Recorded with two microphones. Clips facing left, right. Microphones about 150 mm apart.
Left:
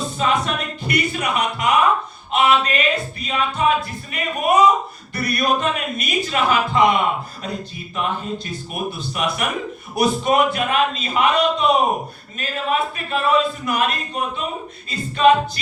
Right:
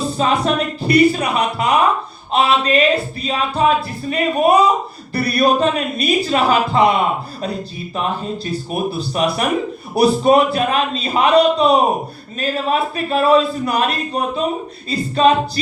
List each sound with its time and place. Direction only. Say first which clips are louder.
0.0 s music: right 4 dB; 35° right (ahead or behind)
8.0 s music: right 2 dB; 35° right (ahead or behind)